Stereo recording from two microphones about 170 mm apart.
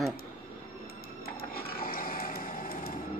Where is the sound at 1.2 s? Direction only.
65° left (ahead or behind).